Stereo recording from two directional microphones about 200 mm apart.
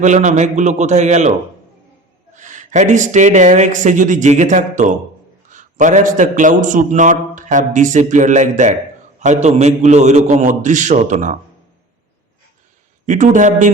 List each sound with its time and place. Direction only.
0.0 s a man's voice: 35° right (ahead or behind)
2.3 s a man's voice: 40° right (ahead or behind)
13.1 s a man's voice: 40° right (ahead or behind)